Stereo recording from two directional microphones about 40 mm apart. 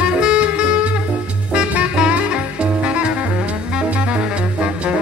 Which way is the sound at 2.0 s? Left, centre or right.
Right.